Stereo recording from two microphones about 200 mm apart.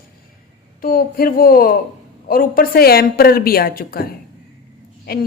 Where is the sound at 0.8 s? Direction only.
45° left (ahead or behind).